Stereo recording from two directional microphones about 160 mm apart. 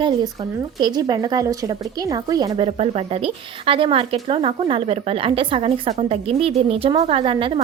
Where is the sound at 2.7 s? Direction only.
40° right (ahead or behind).